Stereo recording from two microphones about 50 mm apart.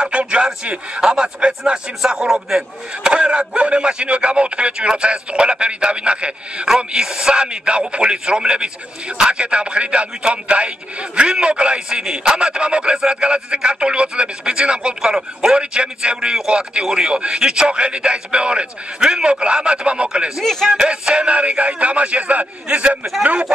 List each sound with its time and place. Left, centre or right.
0.0 s a sound: right
1.0 s speech: centre
20.4 s speech: centre
20.7 s speech: centre